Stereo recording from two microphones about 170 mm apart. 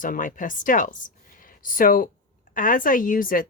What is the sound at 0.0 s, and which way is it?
Speech, 50° left (ahead or behind).